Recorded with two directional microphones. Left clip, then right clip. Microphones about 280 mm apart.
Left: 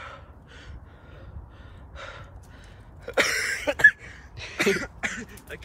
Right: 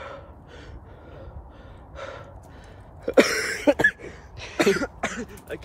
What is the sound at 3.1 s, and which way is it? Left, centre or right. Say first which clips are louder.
Cough: right 4 dB; right.